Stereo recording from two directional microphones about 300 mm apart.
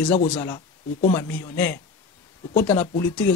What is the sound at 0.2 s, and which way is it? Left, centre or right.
Speech, centre.